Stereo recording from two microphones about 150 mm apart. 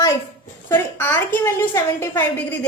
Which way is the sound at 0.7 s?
15° left (ahead or behind).